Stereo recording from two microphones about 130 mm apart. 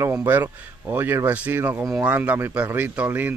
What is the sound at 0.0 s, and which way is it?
Speech, 20° right (ahead or behind).